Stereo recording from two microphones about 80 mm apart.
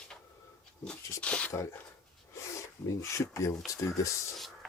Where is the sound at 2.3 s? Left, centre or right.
Left.